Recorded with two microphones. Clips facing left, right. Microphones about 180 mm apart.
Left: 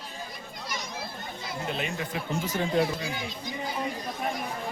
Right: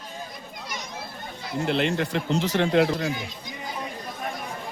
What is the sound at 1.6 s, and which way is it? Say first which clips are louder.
Speech: right 9 dB; 75° right (ahead or behind).